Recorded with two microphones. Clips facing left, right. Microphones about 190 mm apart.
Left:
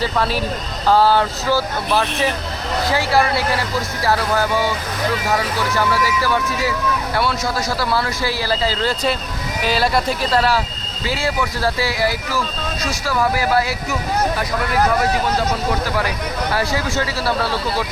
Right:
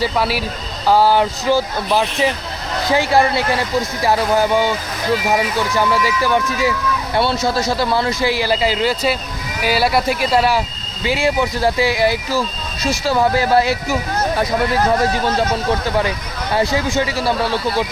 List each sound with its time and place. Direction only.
0.0 s speech: 10° right (ahead or behind); by 13.7 s 25° right (ahead or behind)
16.5 s speech: 20° right (ahead or behind)